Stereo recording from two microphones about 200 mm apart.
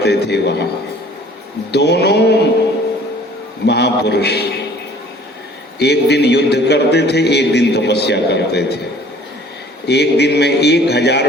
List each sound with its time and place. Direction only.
0.0 s a man's voice: 55° left (ahead or behind)
1.7 s a man's voice: 55° left (ahead or behind)
3.7 s a man's voice: 55° left (ahead or behind)
5.8 s a man's voice: 55° left (ahead or behind)